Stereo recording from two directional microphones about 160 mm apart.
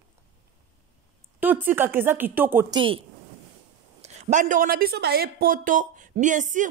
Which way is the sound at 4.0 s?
45° right (ahead or behind).